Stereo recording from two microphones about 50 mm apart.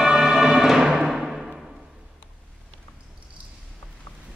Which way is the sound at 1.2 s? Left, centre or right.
Centre.